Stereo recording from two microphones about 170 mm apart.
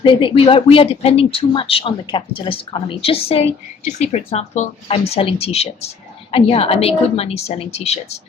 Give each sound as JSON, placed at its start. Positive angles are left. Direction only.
{"t": 0.0, "sound": "speech", "side_deg": 30}